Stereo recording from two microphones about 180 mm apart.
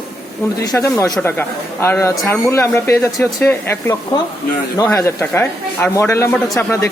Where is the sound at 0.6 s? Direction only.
20° left (ahead or behind).